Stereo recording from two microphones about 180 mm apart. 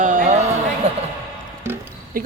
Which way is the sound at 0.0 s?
45° right (ahead or behind).